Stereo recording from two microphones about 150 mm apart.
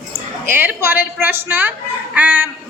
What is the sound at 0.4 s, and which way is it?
A woman's voice, 15° right (ahead or behind).